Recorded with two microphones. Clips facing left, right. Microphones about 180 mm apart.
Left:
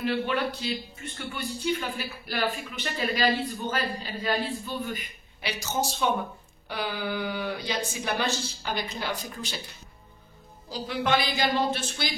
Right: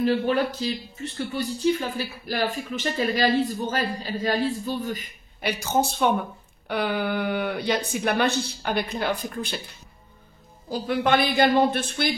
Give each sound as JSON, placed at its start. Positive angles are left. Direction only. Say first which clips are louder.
{"t": 0.0, "sound": "a woman's voice", "louder": "right 5 dB", "side_deg": -40}
{"t": 10.7, "sound": "speech", "louder": "right 4 dB", "side_deg": -55}